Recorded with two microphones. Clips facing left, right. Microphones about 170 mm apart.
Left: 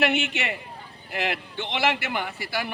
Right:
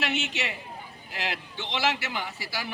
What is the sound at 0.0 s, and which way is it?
A man's voice, 55° left (ahead or behind).